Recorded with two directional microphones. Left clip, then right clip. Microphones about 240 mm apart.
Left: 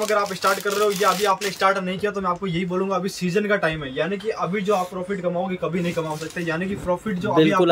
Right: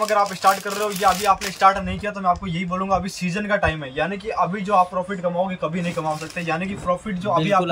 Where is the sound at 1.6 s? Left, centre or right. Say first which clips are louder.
Right 3 dB; centre.